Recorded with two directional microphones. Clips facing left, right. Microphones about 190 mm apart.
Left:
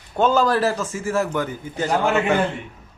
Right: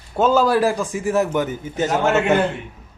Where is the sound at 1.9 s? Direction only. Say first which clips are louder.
Right 1 dB; centre (ahead or behind).